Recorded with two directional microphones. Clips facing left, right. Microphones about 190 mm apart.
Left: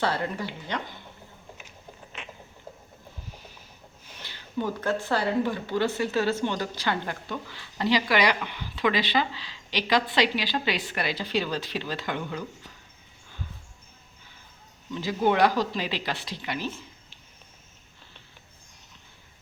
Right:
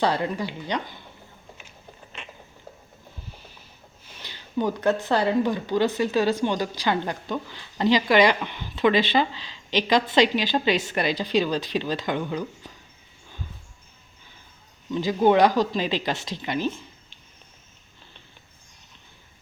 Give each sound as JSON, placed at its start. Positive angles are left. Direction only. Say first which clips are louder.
{"t": 0.0, "sound": "speech", "louder": "right 4 dB", "side_deg": -15}
{"t": 4.2, "sound": "speech", "louder": "right 4 dB", "side_deg": -15}
{"t": 15.0, "sound": "speech", "louder": "right 4 dB", "side_deg": -20}